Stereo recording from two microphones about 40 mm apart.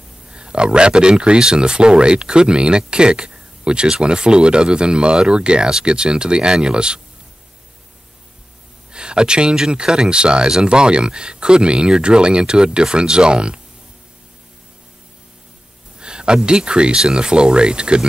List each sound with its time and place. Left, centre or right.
0.3 s speech: right
8.9 s speech: right
16.0 s a sound: right
16.4 s speech: right